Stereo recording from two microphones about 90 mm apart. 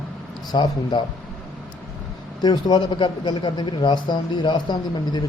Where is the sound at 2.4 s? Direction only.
50° left (ahead or behind).